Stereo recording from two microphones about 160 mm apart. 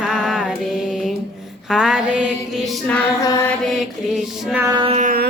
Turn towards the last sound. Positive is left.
turn(degrees=-45)  # may be behind; listen again after turning